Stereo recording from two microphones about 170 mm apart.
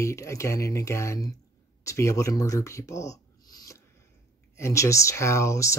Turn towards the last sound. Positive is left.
turn(degrees=20)  # may be behind; listen again after turning